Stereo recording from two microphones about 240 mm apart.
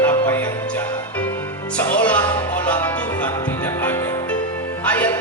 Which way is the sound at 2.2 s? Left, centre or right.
Centre.